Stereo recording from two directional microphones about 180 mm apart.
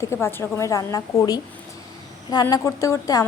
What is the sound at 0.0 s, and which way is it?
A woman's voice, 15° left (ahead or behind).